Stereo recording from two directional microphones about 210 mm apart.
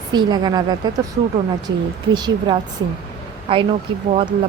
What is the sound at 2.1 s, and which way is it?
Speech, 20° right (ahead or behind).